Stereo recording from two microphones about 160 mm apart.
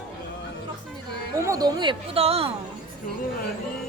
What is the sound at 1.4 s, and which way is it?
Speech, 20° right (ahead or behind).